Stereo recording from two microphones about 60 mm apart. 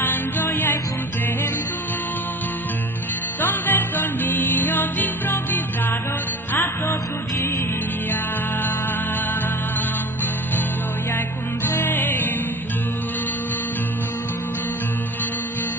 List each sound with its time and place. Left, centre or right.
0.0 s music: left
3.3 s music: left
7.3 s music: left
11.6 s music: left